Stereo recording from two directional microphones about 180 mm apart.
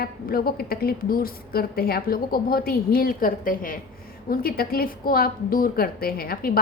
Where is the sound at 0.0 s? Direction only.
55° left (ahead or behind).